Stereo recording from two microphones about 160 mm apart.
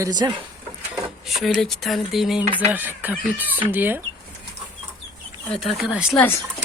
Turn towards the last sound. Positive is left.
turn(degrees=15)  # may be behind; listen again after turning